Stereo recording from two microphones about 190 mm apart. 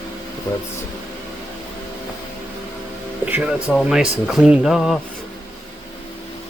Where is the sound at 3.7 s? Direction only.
5° right (ahead or behind).